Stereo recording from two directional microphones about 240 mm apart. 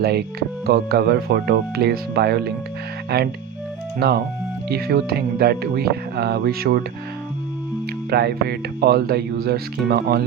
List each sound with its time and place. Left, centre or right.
0.0 s speech: right
4.7 s speech: right
8.1 s speech: right